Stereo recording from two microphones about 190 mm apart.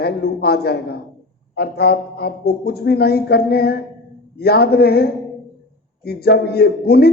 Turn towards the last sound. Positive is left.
turn(degrees=55)  # may be behind; listen again after turning